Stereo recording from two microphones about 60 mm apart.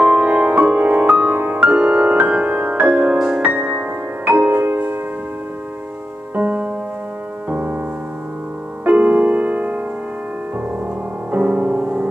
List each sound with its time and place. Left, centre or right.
0.0 s music: right
6.3 s music: right
8.8 s music: right
11.3 s music: right